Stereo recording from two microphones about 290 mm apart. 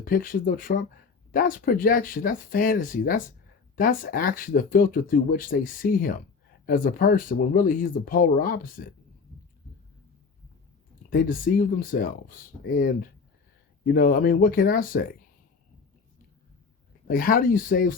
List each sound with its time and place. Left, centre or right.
0.0 s speech: left
11.1 s speech: left
17.1 s speech: left